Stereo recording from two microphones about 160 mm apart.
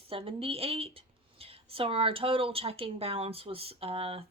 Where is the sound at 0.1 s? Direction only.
35° right (ahead or behind).